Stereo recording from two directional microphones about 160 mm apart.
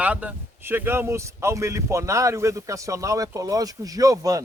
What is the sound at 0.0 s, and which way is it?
Speech, 10° right (ahead or behind).